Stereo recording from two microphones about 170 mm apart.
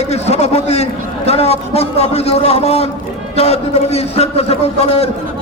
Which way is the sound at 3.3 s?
35° left (ahead or behind).